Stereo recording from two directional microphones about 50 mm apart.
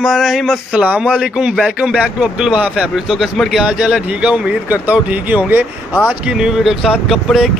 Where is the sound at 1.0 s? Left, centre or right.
Centre.